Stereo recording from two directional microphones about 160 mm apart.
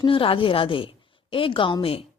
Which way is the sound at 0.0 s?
35° left (ahead or behind).